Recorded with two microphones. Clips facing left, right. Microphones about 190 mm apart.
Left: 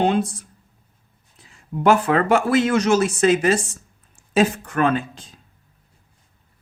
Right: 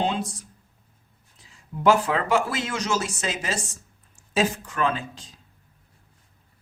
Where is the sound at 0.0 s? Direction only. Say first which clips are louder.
Left 7 dB; 60° left (ahead or behind).